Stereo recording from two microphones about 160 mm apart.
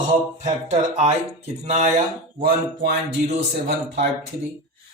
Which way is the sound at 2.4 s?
70° right (ahead or behind).